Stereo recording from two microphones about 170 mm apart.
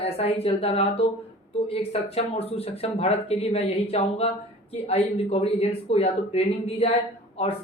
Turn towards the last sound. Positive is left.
turn(degrees=35)  # may be behind; listen again after turning